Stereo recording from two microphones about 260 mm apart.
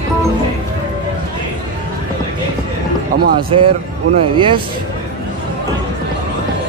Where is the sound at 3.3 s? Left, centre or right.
Centre.